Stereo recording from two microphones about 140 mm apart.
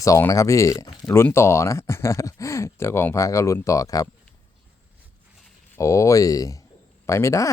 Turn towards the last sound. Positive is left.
turn(degrees=20)  # may be behind; listen again after turning